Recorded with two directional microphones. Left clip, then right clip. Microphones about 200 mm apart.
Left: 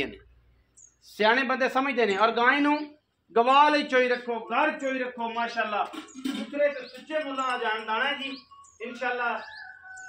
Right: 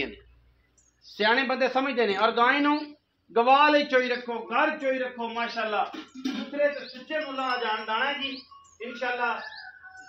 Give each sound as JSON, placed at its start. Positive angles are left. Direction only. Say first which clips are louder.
{"t": 1.1, "sound": "a man's voice", "louder": "left 1 dB", "side_deg": 40}